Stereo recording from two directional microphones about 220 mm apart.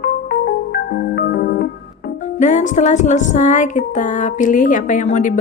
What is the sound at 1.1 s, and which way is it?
Music, 45° left (ahead or behind).